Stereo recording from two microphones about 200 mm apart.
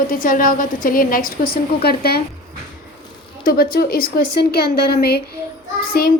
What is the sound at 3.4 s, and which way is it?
A woman's voice, 50° left (ahead or behind).